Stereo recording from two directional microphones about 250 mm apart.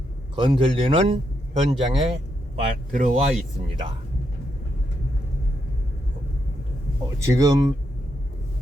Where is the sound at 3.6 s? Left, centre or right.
Centre.